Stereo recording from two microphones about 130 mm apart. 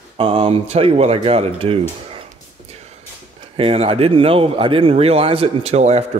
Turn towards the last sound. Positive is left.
turn(degrees=-55)  # may be behind; listen again after turning